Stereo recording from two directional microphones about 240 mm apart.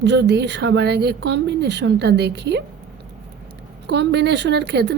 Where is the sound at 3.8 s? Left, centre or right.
Right.